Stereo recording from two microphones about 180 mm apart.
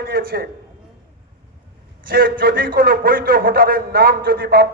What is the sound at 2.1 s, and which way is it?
A man's voice, 55° right (ahead or behind).